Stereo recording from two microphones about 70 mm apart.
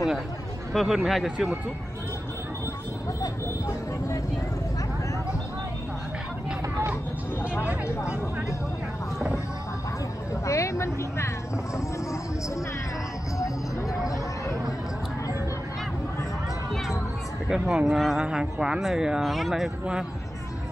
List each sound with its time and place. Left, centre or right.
0.7 s speech: centre
3.2 s vehicle: left
7.8 s speech: left
10.4 s speech: left
17.5 s speech: centre